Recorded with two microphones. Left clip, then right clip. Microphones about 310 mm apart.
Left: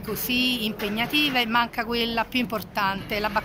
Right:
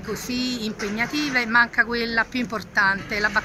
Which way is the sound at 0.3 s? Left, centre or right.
Centre.